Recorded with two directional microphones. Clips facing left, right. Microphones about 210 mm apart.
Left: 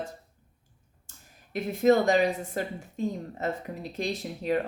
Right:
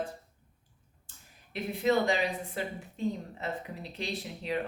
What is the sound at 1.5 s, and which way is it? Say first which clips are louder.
Speech: left 6 dB; 45° left (ahead or behind).